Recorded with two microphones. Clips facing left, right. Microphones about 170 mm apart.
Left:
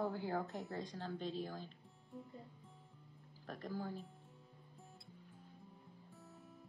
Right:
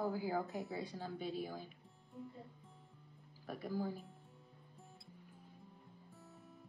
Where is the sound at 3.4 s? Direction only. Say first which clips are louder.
Right 4 dB; 10° right (ahead or behind).